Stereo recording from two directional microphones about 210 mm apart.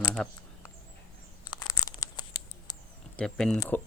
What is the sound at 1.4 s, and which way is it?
Tearing, 20° left (ahead or behind).